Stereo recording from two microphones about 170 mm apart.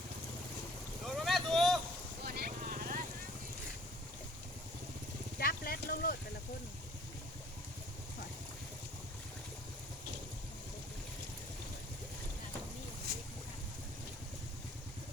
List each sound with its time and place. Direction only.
1.0 s vehicle: centre (ahead or behind)
2.2 s vehicle: 65° right (ahead or behind)
5.4 s a sound: 60° left (ahead or behind)